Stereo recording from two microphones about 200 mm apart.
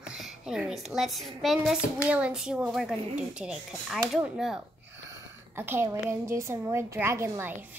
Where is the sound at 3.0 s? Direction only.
35° right (ahead or behind).